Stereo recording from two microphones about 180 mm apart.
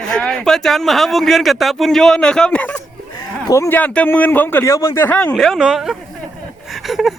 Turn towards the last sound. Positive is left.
turn(degrees=0)  # may be behind; listen again after turning